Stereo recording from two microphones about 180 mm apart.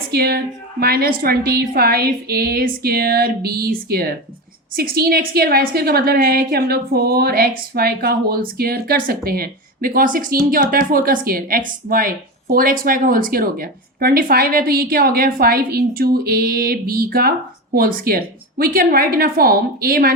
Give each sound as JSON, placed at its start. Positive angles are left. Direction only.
{"t": 0.1, "sound": "a woman's voice", "side_deg": -60}